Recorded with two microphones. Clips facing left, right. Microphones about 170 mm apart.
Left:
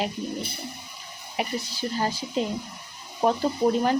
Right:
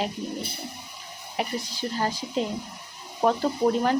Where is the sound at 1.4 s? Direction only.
5° left (ahead or behind).